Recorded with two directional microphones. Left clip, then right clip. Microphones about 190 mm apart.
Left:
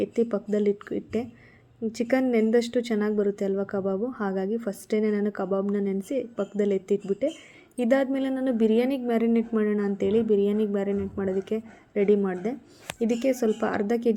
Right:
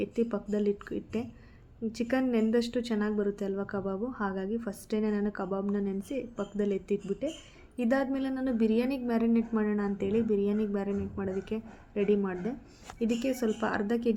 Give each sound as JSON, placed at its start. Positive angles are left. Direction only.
{"t": 0.0, "sound": "speech", "side_deg": 20}